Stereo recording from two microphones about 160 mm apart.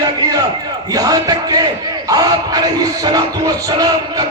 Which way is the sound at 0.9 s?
25° right (ahead or behind).